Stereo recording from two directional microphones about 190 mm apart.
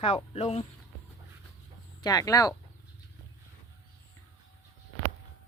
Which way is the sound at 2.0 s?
20° left (ahead or behind).